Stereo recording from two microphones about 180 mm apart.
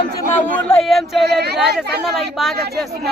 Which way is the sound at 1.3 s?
65° right (ahead or behind).